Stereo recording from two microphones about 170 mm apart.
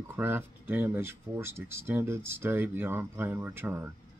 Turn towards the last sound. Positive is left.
turn(degrees=-15)  # may be behind; listen again after turning